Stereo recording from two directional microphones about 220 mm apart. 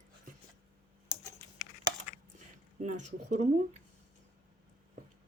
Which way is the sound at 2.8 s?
35° right (ahead or behind).